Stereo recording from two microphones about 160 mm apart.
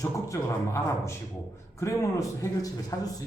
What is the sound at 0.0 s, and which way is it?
Speech, 20° left (ahead or behind).